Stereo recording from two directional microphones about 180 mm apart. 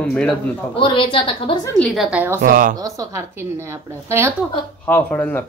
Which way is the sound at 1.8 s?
Centre (ahead or behind).